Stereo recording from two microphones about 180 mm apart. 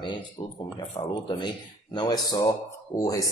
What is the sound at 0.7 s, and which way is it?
A man's voice, 25° left (ahead or behind).